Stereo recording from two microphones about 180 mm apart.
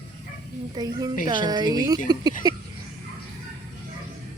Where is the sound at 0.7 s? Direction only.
20° right (ahead or behind).